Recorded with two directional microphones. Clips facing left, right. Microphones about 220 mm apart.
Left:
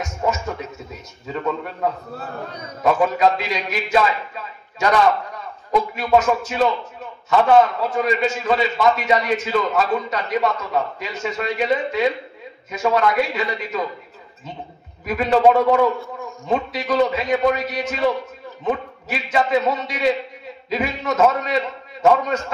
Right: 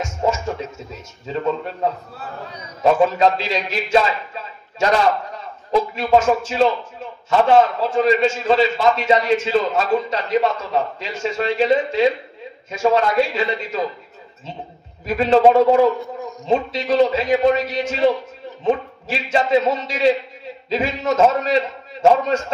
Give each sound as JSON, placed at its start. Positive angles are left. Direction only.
{"t": 0.0, "sound": "music", "side_deg": -30}
{"t": 1.2, "sound": "a man's voice", "side_deg": -25}
{"t": 2.8, "sound": "a man's voice", "side_deg": -25}
{"t": 15.0, "sound": "a man's voice", "side_deg": -25}